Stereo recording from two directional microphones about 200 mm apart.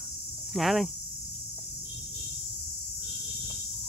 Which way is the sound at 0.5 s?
Centre (ahead or behind).